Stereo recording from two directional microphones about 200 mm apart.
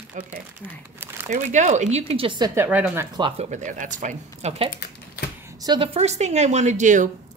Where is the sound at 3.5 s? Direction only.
40° right (ahead or behind).